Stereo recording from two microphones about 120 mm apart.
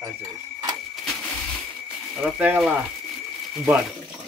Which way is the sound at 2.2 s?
10° right (ahead or behind).